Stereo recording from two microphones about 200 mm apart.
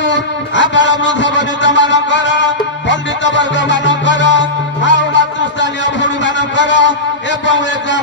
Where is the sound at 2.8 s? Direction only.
65° left (ahead or behind).